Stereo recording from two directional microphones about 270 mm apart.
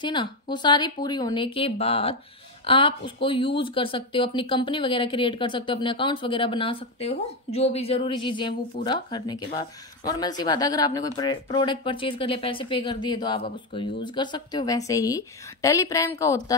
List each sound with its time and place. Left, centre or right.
0.0 s speech: centre